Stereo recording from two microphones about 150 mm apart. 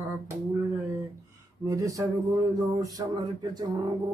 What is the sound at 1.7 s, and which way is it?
Mantra, 20° right (ahead or behind).